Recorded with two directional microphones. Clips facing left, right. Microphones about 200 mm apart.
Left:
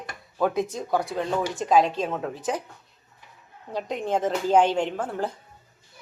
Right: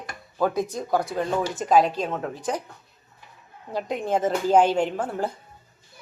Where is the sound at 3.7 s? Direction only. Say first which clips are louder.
Right 1 dB; 5° right (ahead or behind).